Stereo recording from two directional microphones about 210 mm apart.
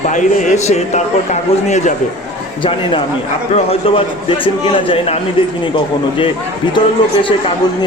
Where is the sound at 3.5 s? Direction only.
30° left (ahead or behind).